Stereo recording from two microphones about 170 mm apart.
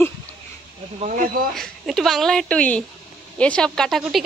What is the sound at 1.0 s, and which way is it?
Speech, 50° right (ahead or behind).